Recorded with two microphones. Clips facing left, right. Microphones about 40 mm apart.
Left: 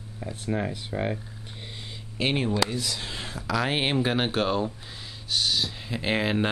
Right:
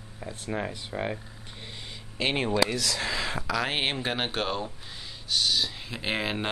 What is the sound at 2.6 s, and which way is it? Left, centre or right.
Speech, right.